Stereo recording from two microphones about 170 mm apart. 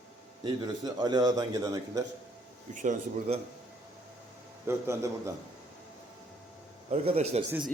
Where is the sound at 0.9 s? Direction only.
25° right (ahead or behind).